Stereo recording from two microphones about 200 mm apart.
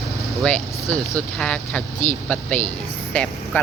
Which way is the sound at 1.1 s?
5° left (ahead or behind).